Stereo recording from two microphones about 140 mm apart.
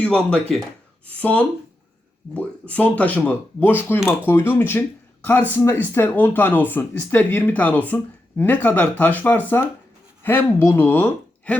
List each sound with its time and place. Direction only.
0.0 s speech: 5° left (ahead or behind)